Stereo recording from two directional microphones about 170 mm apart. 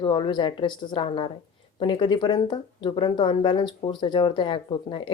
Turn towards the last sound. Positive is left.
turn(degrees=30)  # may be behind; listen again after turning